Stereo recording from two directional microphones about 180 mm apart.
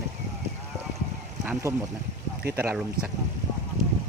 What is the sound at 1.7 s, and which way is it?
Speech, 20° right (ahead or behind).